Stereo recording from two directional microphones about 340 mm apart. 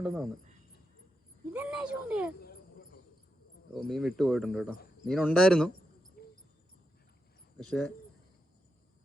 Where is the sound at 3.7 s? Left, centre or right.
Centre.